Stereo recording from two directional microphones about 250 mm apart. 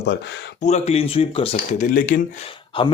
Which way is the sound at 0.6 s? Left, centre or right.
Left.